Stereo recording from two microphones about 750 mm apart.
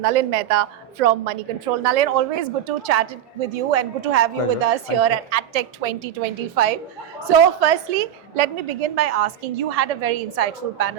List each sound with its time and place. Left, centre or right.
0.0 s a woman's voice: right